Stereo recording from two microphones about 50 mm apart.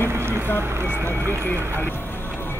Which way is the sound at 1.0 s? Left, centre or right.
Right.